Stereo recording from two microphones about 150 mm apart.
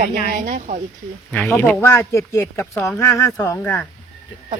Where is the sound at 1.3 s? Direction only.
15° left (ahead or behind).